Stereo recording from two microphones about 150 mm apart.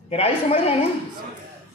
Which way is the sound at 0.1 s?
40° left (ahead or behind).